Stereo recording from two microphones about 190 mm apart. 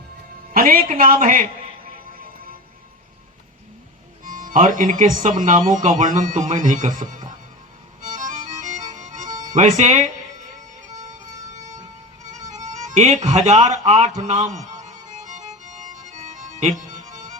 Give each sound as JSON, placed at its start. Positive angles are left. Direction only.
{"t": 0.5, "sound": "a woman's voice", "side_deg": -50}
{"t": 4.2, "sound": "speech", "side_deg": -45}
{"t": 8.0, "sound": "music", "side_deg": -45}
{"t": 9.6, "sound": "speech", "side_deg": -40}
{"t": 10.8, "sound": "music", "side_deg": -20}
{"t": 11.1, "sound": "music", "side_deg": -40}
{"t": 12.2, "sound": "speech", "side_deg": -40}
{"t": 15.2, "sound": "music", "side_deg": -40}